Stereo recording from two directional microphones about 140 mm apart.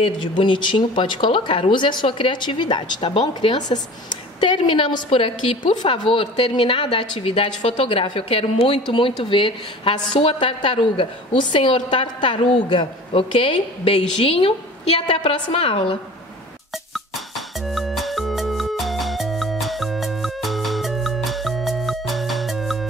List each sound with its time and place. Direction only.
0.4 s speech: 35° left (ahead or behind)
17.6 s music: centre (ahead or behind)